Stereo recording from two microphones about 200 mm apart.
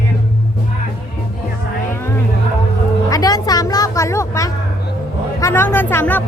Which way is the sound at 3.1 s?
20° left (ahead or behind).